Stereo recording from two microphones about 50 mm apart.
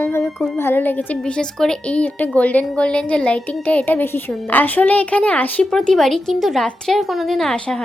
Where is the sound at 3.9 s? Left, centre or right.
Left.